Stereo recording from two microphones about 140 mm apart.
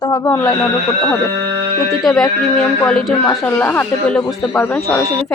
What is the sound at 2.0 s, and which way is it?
Speech, 5° left (ahead or behind).